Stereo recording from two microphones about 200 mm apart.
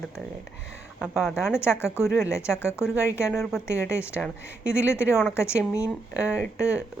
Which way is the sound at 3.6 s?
15° left (ahead or behind).